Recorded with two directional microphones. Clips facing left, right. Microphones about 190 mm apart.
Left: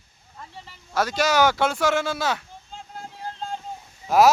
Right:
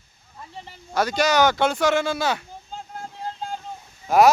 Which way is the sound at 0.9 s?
Centre (ahead or behind).